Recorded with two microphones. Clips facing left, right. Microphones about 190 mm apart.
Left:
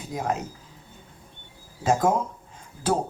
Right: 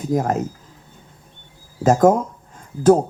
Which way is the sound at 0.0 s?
45° right (ahead or behind).